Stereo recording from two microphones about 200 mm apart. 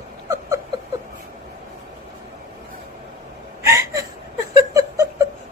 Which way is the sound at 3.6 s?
15° right (ahead or behind).